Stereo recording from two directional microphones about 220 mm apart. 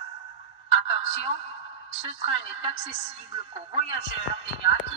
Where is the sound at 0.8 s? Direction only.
30° right (ahead or behind).